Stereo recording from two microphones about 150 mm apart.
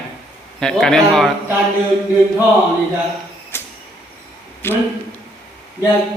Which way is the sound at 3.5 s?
15° left (ahead or behind).